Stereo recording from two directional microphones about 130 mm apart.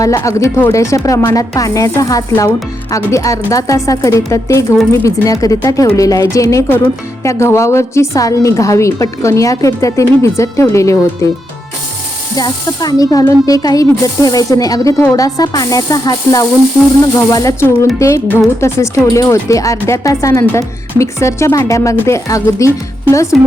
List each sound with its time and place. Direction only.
0.0 s speech: 25° left (ahead or behind)
12.4 s speech: 30° left (ahead or behind)
23.3 s speech: centre (ahead or behind)